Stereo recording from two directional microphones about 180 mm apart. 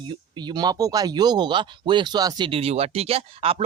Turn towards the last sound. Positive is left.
turn(degrees=-30)  # may be behind; listen again after turning